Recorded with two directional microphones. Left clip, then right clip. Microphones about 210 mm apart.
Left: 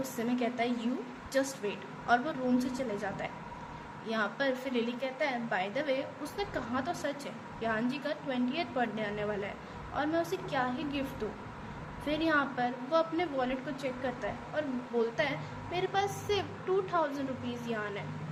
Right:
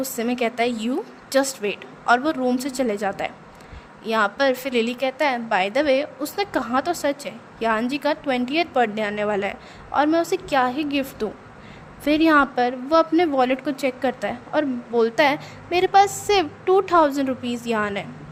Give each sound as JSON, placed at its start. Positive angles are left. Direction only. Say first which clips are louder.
{"t": 0.2, "sound": "a woman's voice", "louder": "right 10 dB", "side_deg": -50}